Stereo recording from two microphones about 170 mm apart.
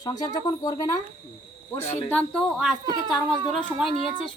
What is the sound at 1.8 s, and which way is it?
Speech, 35° left (ahead or behind).